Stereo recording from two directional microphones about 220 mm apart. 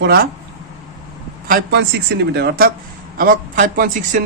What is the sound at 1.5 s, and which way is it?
A woman's voice, 50° right (ahead or behind).